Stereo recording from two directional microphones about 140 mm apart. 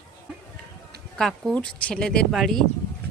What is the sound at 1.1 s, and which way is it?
Speech, centre (ahead or behind).